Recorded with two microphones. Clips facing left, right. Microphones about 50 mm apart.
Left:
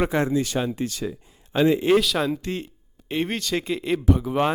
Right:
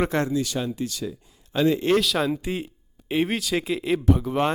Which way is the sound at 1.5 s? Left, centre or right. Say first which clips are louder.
Left 2 dB; centre.